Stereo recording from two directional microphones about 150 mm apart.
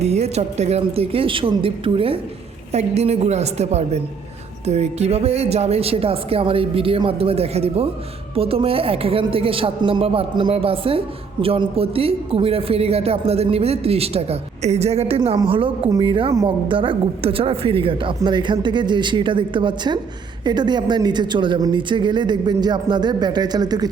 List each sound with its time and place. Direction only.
0.0 s a woman's voice: 45° right (ahead or behind)
16.3 s speech: 25° right (ahead or behind)
16.7 s speech: 35° right (ahead or behind)